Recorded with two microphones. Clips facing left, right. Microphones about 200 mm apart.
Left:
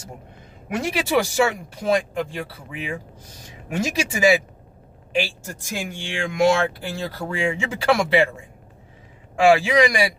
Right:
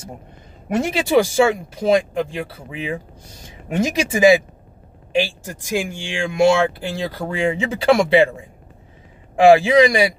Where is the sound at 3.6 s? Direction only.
25° right (ahead or behind).